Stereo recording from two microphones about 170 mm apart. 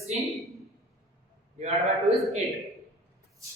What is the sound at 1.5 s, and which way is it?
Speech, 40° right (ahead or behind).